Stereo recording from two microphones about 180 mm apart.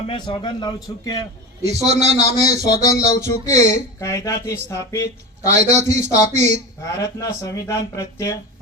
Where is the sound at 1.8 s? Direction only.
35° right (ahead or behind).